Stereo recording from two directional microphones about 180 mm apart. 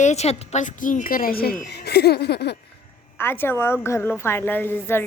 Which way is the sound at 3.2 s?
10° left (ahead or behind).